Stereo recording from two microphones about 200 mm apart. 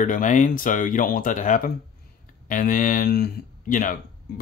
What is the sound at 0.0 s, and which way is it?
Speech, 40° left (ahead or behind).